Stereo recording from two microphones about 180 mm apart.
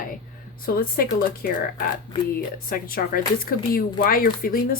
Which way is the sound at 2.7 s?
55° left (ahead or behind).